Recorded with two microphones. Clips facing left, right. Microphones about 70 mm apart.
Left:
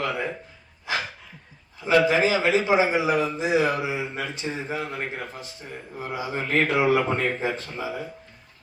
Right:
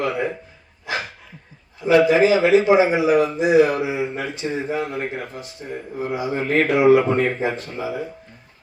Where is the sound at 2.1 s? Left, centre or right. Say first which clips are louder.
Right 6 dB; right.